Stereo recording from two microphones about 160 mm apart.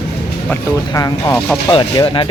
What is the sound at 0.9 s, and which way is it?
Speech, 20° left (ahead or behind).